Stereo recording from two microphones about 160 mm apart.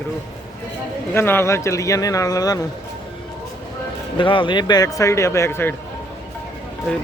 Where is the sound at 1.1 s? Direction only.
15° left (ahead or behind).